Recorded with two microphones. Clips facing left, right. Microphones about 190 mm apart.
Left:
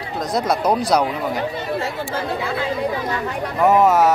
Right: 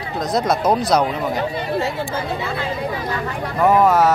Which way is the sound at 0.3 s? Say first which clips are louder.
Right 1 dB; 10° left (ahead or behind).